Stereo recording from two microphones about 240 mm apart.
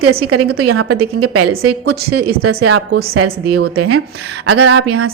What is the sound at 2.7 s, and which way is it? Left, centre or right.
Speech, right.